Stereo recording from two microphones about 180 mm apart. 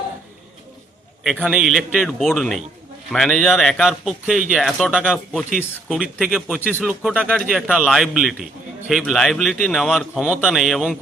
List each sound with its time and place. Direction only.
1.2 s speech: 5° right (ahead or behind)
6.6 s speech: 10° left (ahead or behind)
6.8 s speech: 5° right (ahead or behind)